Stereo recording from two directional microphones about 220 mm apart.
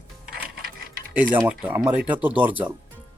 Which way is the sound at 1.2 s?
5° right (ahead or behind).